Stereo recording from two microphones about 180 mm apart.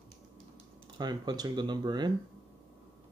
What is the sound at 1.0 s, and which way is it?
Speech, 20° right (ahead or behind).